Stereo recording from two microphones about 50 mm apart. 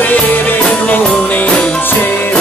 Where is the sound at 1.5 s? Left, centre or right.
Left.